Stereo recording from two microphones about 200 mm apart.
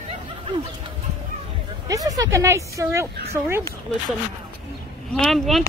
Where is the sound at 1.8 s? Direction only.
15° right (ahead or behind).